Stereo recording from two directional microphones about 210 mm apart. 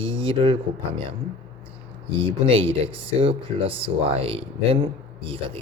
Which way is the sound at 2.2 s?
25° right (ahead or behind).